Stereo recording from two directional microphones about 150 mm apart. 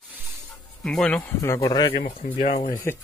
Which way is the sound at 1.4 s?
20° left (ahead or behind).